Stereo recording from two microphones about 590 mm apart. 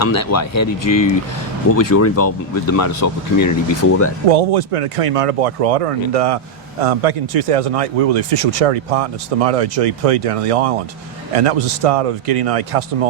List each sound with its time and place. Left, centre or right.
0.0 s speech: left
4.3 s speech: right